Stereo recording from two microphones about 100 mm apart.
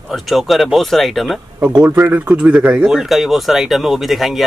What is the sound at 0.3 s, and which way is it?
Speech, centre (ahead or behind).